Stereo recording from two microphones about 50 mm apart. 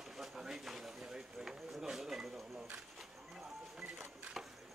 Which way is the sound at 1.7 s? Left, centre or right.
Centre.